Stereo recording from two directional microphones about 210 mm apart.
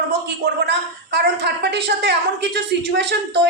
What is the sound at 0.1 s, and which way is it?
A woman's voice, 50° right (ahead or behind).